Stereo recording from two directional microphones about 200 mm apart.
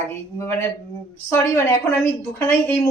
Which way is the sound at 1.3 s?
15° left (ahead or behind).